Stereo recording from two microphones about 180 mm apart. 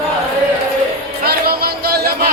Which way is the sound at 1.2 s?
60° right (ahead or behind).